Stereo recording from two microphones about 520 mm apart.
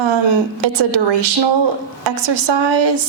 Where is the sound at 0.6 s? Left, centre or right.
Right.